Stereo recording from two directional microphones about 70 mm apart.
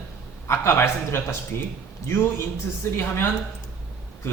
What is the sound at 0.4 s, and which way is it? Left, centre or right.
Speech, left.